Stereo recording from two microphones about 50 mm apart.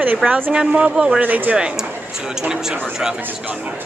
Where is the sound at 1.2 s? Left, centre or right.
Right.